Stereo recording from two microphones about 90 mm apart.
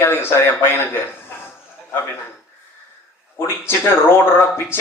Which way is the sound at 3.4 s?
25° left (ahead or behind).